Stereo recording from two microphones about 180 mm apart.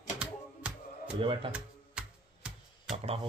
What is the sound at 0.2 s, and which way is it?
Music, 5° right (ahead or behind).